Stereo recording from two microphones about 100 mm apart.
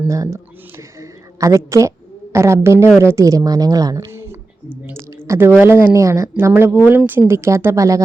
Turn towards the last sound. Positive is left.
turn(degrees=-35)  # may be behind; listen again after turning